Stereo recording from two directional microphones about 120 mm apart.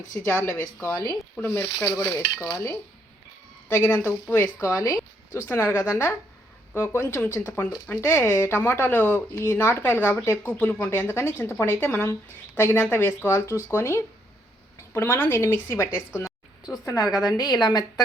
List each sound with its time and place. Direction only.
0.3 s speech: 20° left (ahead or behind)
3.7 s a woman's voice: 20° left (ahead or behind); by 18.0 s 35° left (ahead or behind)